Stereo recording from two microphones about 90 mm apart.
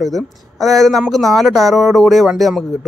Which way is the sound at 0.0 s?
Centre (ahead or behind).